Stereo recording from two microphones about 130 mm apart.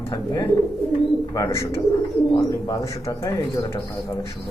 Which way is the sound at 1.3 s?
25° left (ahead or behind).